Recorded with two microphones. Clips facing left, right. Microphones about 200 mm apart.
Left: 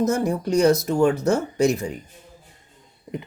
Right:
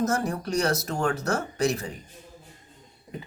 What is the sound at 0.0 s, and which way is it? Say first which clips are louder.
Speech: left 5 dB; 20° left (ahead or behind).